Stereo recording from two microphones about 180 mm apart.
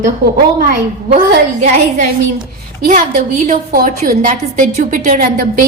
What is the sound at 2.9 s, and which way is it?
A woman's voice, 45° right (ahead or behind).